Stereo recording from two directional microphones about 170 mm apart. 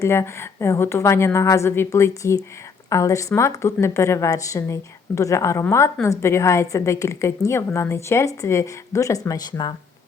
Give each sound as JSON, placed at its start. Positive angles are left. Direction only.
{"t": 0.0, "sound": "a woman's voice", "side_deg": 15}